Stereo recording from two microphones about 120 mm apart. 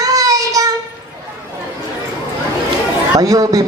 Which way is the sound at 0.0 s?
30° right (ahead or behind).